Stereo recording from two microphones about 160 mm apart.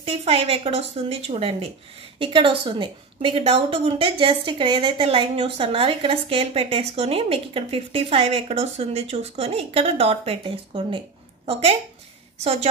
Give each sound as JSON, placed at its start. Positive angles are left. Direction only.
{"t": 0.0, "sound": "a woman's voice", "side_deg": -40}